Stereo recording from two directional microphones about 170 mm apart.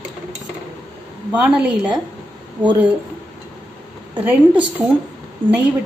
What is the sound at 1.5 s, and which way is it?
Speech, 5° right (ahead or behind).